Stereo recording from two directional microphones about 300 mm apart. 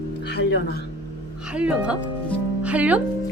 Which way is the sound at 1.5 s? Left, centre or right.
Centre.